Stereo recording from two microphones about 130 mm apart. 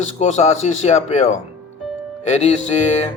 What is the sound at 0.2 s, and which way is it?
Speech, 60° left (ahead or behind).